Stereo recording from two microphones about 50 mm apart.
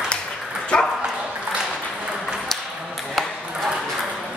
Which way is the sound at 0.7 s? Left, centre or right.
Centre.